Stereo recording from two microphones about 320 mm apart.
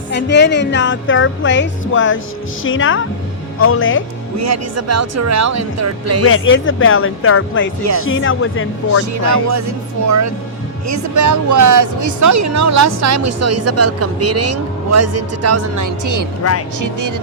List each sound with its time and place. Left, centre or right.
0.1 s speech: left
4.4 s speech: right
6.2 s speech: left
9.2 s speech: right
16.4 s speech: left
16.8 s speech: right